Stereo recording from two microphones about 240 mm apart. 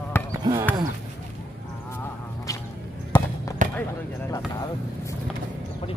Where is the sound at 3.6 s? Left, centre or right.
Right.